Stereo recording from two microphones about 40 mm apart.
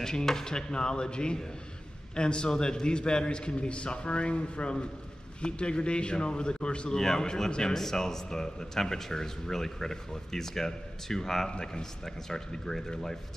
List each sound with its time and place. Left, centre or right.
0.0 s a man's voice: centre
6.9 s a man's voice: centre